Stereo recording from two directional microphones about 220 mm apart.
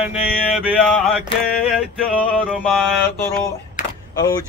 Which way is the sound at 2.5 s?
Centre (ahead or behind).